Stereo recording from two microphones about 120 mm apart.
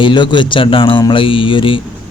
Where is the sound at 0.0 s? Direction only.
40° left (ahead or behind).